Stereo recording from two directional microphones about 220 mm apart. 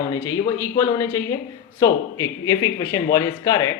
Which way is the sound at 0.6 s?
10° left (ahead or behind).